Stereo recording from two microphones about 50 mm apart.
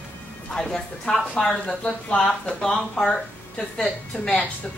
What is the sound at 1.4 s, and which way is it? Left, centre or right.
Speech, centre.